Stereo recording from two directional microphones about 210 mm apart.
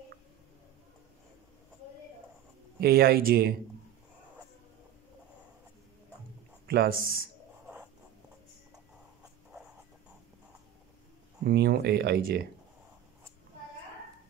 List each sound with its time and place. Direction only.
2.8 s speech: 45° right (ahead or behind)
6.7 s speech: 45° right (ahead or behind)
11.4 s speech: 50° right (ahead or behind)